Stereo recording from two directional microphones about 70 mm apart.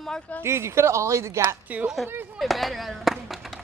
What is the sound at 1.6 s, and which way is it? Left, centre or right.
Speech, right.